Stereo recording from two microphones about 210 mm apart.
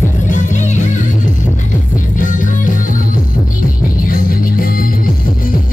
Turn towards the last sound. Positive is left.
turn(degrees=45)  # may be behind; listen again after turning